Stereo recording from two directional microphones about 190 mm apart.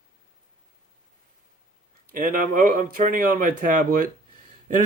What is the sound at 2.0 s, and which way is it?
Speech, 50° right (ahead or behind).